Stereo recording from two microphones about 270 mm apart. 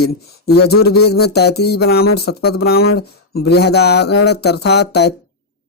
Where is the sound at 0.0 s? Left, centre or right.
Left.